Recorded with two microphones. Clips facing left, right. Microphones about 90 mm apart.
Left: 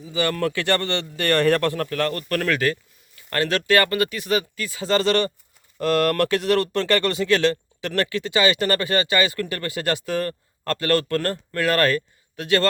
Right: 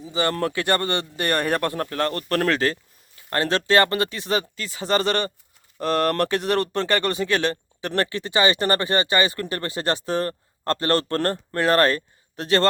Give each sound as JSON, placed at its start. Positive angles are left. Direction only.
{"t": 0.0, "sound": "speech", "side_deg": -25}